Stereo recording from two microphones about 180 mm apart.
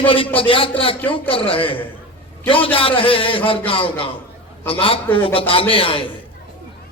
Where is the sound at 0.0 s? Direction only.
30° left (ahead or behind).